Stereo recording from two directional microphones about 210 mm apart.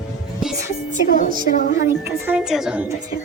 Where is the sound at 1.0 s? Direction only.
40° left (ahead or behind).